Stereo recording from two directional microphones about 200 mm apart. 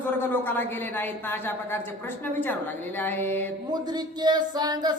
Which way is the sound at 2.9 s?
10° left (ahead or behind).